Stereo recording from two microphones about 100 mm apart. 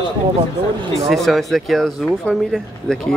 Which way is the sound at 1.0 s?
Centre (ahead or behind).